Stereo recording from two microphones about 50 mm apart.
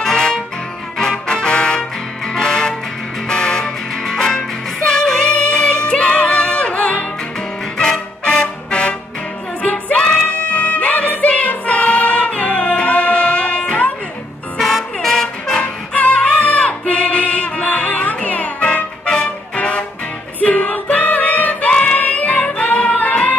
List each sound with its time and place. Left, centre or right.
0.0 s music: centre
14.6 s music: centre
15.6 s music: left
19.0 s music: centre
19.5 s music: left